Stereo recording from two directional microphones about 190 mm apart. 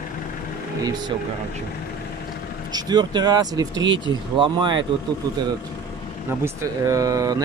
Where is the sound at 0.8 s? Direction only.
20° right (ahead or behind).